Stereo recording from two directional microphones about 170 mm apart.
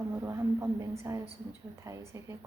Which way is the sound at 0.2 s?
15° right (ahead or behind).